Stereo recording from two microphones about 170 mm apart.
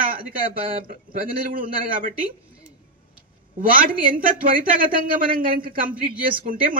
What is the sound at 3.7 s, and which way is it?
Speech, 55° right (ahead or behind).